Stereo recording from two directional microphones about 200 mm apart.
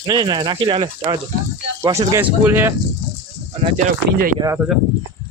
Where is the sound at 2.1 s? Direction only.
10° right (ahead or behind).